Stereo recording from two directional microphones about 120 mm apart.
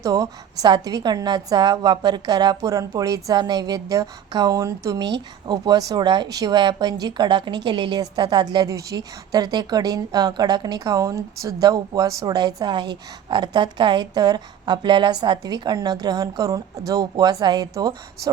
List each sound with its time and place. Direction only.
0.0 s a woman's voice: 30° right (ahead or behind)